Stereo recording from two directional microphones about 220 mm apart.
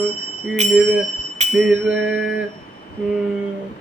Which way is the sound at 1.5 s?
5° right (ahead or behind).